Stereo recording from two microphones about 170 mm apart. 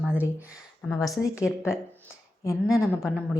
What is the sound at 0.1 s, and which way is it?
Speech, 15° left (ahead or behind).